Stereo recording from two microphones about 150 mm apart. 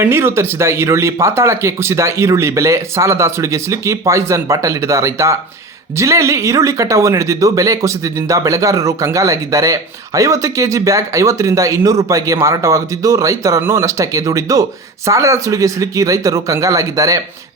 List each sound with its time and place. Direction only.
0.0 s speech: 15° right (ahead or behind)